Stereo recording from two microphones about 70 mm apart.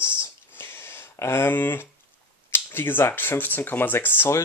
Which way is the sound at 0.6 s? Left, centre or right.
Left.